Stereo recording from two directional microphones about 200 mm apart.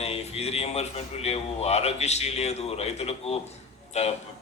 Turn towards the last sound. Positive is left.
turn(degrees=35)  # may be behind; listen again after turning